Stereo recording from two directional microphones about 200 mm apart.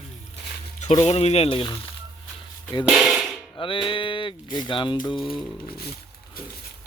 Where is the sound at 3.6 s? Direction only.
25° left (ahead or behind).